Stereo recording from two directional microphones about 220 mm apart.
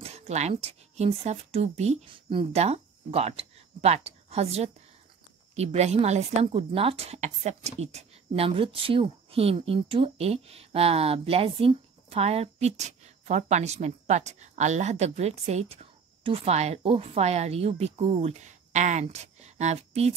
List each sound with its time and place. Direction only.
0.0 s a woman's voice: 30° right (ahead or behind)